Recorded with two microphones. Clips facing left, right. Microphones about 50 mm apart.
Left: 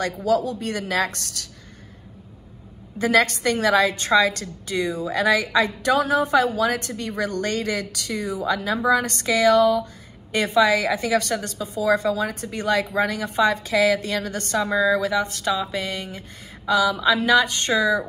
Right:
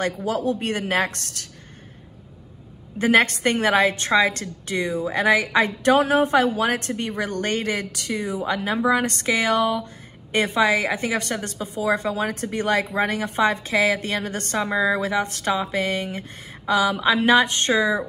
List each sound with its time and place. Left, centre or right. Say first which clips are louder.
0.0 s a woman's voice: left 2 dB; right
3.0 s a woman's voice: right 1 dB; right